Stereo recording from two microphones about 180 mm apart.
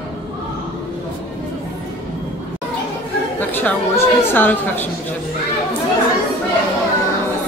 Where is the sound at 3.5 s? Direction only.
10° left (ahead or behind).